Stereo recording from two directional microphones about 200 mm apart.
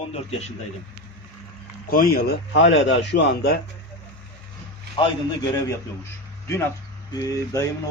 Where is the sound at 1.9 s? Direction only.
45° left (ahead or behind).